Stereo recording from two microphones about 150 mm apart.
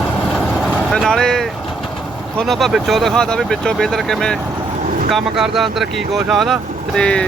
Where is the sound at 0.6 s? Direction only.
5° left (ahead or behind).